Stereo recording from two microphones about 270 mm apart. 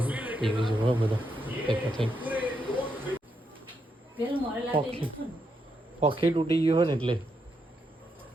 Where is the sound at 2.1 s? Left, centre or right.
Centre.